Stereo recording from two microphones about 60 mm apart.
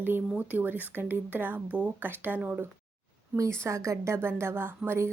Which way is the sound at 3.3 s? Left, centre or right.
Right.